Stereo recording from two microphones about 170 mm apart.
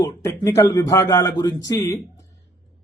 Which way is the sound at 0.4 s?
20° left (ahead or behind).